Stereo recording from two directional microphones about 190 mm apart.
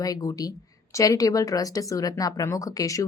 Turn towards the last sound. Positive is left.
turn(degrees=15)  # may be behind; listen again after turning